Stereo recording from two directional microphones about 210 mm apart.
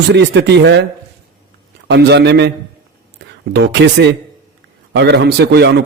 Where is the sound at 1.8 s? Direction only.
55° right (ahead or behind).